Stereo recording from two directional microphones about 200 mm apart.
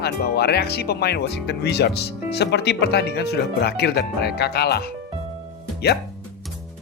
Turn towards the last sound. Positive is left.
turn(degrees=55)  # may be behind; listen again after turning